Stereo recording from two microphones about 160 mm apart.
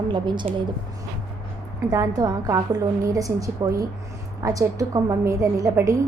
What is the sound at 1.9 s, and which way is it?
A woman's voice, 20° right (ahead or behind).